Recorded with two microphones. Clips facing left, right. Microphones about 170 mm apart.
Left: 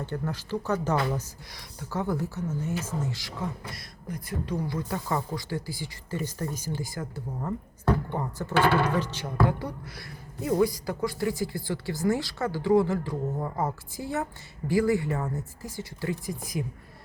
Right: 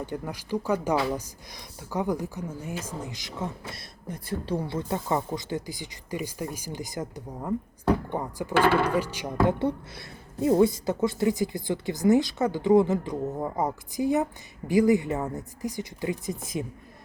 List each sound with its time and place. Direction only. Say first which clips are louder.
0.0 s a woman's voice: left 1 dB; 15° right (ahead or behind)